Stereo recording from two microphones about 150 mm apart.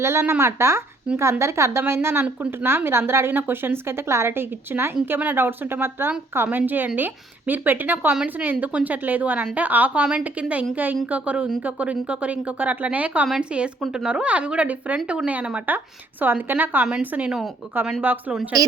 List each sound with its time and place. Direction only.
0.0 s a woman's voice: 20° right (ahead or behind)